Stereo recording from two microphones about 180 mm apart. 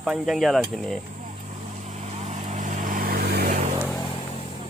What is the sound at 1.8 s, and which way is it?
Vehicle, 40° right (ahead or behind).